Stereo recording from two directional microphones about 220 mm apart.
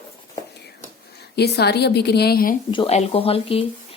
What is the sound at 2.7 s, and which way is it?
Speech, 25° left (ahead or behind).